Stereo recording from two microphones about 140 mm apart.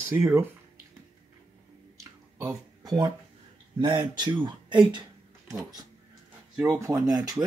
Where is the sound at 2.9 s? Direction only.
30° right (ahead or behind).